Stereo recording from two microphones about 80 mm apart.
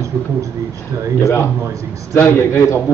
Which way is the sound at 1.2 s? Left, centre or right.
Left.